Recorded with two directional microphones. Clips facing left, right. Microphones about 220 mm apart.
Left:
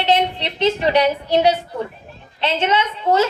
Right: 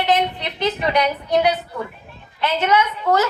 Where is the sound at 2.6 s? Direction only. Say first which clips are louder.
Right 1 dB; 25° left (ahead or behind).